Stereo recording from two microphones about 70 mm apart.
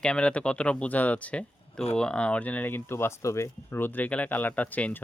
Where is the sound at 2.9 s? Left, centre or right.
Left.